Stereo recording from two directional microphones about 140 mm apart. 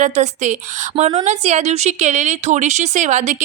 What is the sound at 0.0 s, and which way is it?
A woman's voice, 60° right (ahead or behind).